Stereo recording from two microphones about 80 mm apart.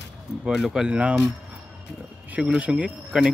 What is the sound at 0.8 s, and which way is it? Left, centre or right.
Speech, centre.